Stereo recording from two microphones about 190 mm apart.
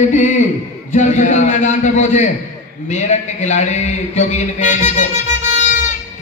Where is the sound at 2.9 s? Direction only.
40° left (ahead or behind).